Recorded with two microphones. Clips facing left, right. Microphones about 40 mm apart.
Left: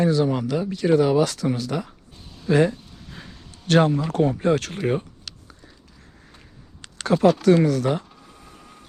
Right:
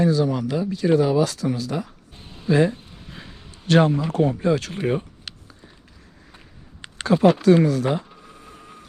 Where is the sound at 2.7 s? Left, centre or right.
Right.